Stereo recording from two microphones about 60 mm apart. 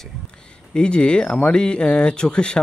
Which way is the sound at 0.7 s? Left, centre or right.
Centre.